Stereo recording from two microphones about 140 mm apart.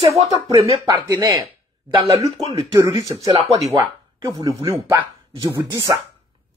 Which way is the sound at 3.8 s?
30° right (ahead or behind).